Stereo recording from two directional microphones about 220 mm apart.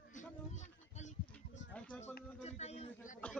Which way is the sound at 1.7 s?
5° left (ahead or behind).